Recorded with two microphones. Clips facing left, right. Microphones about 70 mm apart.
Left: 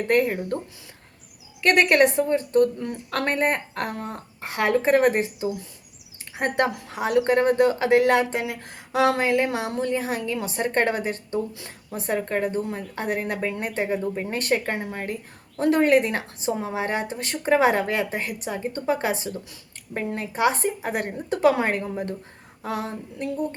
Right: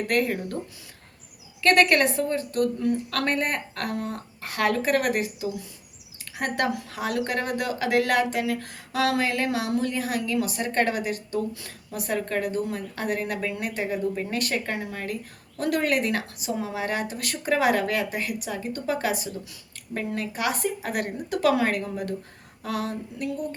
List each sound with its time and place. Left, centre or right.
0.1 s speech: left
1.6 s speech: centre